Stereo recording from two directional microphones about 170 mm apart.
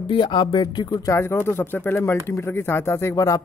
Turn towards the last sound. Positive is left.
turn(degrees=20)  # may be behind; listen again after turning